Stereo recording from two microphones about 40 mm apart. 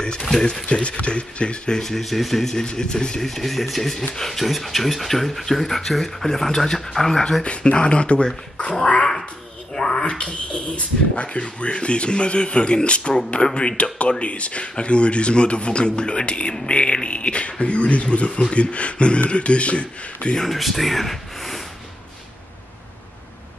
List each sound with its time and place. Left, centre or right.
0.0 s speech: centre
0.7 s speech: left
1.8 s speech: centre
2.5 s speech: centre
3.3 s speech: centre
7.4 s speech: left
9.8 s a sound: centre
10.0 s speech: left
20.3 s speech: centre